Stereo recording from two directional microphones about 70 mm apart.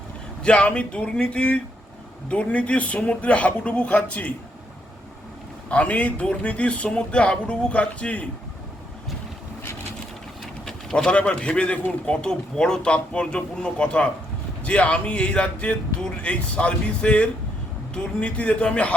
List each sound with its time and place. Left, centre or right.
0.4 s speech: centre
5.6 s speech: centre
10.7 s speech: centre